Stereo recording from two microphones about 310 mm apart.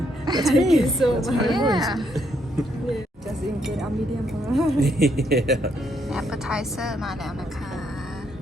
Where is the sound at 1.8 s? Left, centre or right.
Centre.